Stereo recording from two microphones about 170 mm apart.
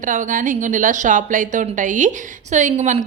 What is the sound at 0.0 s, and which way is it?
Speech, 50° right (ahead or behind).